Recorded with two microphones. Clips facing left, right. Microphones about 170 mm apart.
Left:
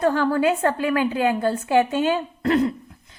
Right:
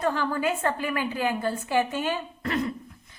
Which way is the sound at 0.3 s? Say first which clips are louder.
Left 6 dB; 65° left (ahead or behind).